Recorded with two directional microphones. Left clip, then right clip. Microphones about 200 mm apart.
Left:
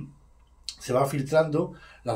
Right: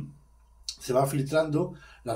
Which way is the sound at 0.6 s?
35° left (ahead or behind).